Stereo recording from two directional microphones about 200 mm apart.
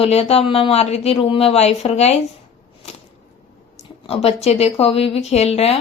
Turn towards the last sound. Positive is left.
turn(degrees=30)  # may be behind; listen again after turning